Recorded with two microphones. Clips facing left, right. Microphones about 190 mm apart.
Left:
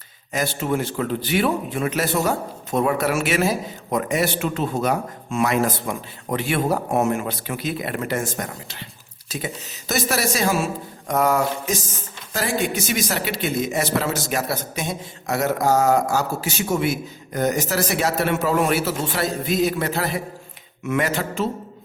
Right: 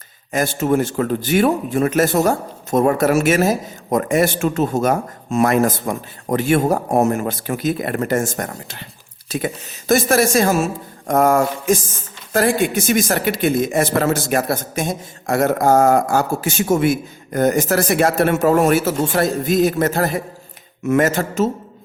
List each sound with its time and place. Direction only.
0.3 s a man's voice: 45° right (ahead or behind)
9.9 s a man's voice: 50° right (ahead or behind)